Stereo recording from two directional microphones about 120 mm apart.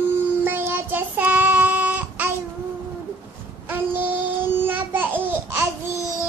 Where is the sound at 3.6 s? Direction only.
15° right (ahead or behind).